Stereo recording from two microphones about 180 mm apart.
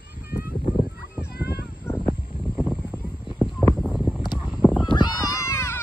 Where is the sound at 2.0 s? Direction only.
5° right (ahead or behind).